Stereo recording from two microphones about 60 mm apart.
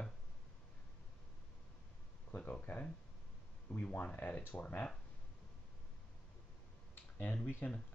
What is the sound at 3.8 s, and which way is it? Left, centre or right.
Speech, left.